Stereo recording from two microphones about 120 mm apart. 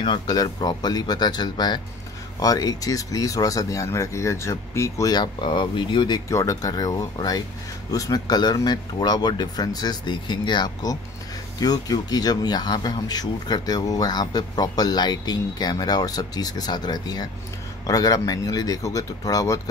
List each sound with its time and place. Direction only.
0.0 s speech: 35° left (ahead or behind)